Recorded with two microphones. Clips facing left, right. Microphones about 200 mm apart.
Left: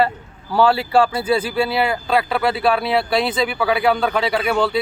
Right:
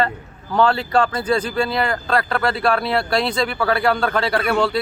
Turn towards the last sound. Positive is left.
turn(degrees=0)  # may be behind; listen again after turning